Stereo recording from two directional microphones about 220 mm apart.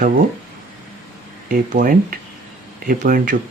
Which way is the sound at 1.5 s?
40° right (ahead or behind).